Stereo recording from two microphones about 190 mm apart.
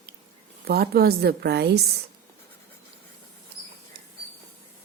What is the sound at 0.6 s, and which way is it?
A woman's voice, 55° right (ahead or behind).